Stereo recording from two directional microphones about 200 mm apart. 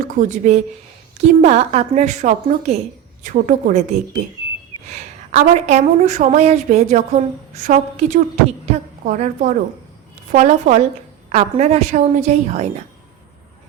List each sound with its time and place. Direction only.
0.0 s a woman's voice: 40° right (ahead or behind)